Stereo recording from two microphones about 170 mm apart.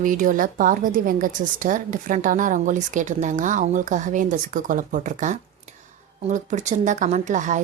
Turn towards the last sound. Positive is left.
turn(degrees=-45)  # may be behind; listen again after turning